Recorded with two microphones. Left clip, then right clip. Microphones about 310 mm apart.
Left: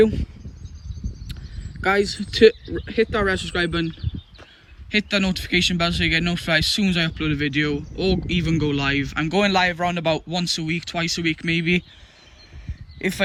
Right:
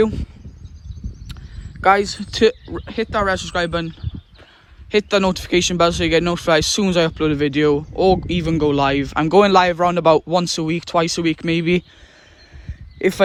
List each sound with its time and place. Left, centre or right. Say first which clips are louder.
0.0 s speech: left 1 dB; centre
1.8 s speech: right 5 dB; centre
12.6 s a sound: right 7 dB; centre